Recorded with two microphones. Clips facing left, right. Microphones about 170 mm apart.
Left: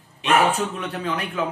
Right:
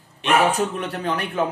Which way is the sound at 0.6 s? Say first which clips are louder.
Right 2 dB; 40° right (ahead or behind).